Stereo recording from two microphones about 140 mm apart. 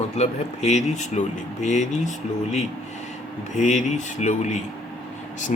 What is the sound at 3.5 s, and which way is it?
Speech, 60° left (ahead or behind).